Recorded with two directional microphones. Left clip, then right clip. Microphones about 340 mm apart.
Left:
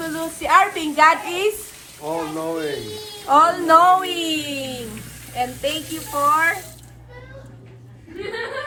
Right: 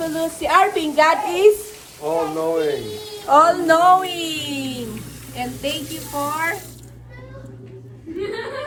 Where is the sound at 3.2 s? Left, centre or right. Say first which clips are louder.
Right 1 dB; centre.